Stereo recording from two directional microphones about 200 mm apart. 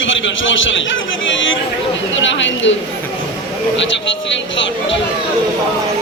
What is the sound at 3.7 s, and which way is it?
Speech, 65° left (ahead or behind).